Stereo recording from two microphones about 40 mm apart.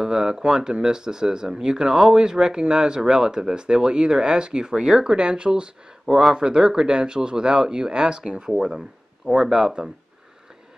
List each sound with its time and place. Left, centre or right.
0.0 s speech: centre
6.0 s speech: centre
6.3 s speech: centre